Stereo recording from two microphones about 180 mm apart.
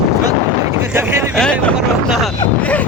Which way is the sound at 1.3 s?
5° left (ahead or behind).